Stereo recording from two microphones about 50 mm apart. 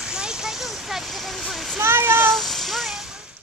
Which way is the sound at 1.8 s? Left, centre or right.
Right.